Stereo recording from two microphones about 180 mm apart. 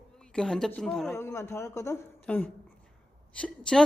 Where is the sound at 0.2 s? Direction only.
5° left (ahead or behind).